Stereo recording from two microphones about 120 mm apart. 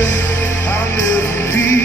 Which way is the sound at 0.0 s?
20° left (ahead or behind).